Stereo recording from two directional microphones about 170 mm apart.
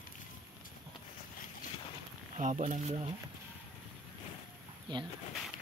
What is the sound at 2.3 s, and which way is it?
Speech, 45° right (ahead or behind).